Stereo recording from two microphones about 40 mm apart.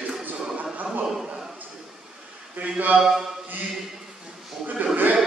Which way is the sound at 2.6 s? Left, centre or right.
Right.